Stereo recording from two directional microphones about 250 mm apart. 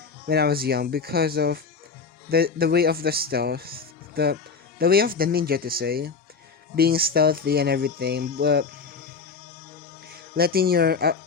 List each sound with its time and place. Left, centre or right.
0.3 s speech: right
10.3 s speech: right